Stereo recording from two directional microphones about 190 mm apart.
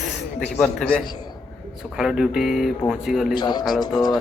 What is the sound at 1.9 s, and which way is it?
Speech, centre (ahead or behind).